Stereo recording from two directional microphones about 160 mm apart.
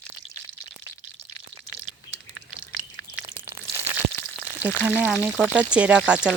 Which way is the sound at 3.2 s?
15° right (ahead or behind).